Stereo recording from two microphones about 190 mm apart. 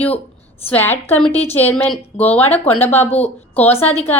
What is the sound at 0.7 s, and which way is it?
A woman's voice, 10° left (ahead or behind).